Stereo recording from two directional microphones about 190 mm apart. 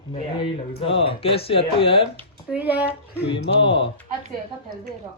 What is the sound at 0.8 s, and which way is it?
Speech, 30° left (ahead or behind).